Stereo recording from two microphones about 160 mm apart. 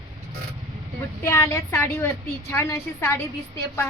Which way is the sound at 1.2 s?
15° left (ahead or behind).